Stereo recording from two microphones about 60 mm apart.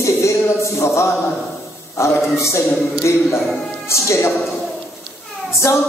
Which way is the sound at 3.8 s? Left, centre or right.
Left.